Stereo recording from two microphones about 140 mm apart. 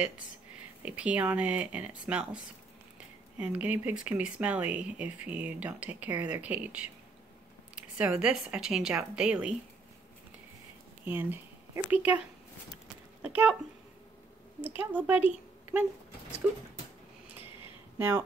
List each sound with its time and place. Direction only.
0.8 s speech: 10° right (ahead or behind)
11.1 s speech: 15° right (ahead or behind)
12.8 s a sound: 10° right (ahead or behind)
14.8 s speech: 10° right (ahead or behind)
17.9 s speech: 15° right (ahead or behind)